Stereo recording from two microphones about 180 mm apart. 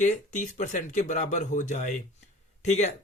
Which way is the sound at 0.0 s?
45° left (ahead or behind).